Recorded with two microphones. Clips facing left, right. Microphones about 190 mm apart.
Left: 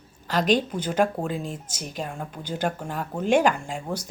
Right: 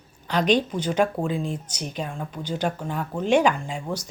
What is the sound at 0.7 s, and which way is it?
Speech, 5° left (ahead or behind).